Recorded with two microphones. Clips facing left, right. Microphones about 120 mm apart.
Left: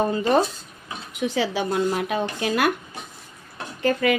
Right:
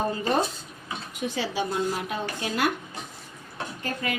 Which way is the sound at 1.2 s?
90° left.